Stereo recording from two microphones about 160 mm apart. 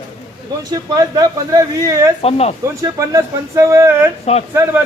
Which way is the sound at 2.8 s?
20° right (ahead or behind).